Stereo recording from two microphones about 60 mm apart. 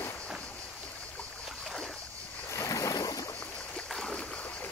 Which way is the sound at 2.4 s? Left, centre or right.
Left.